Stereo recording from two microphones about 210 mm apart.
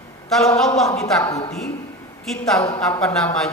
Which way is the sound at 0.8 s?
15° left (ahead or behind).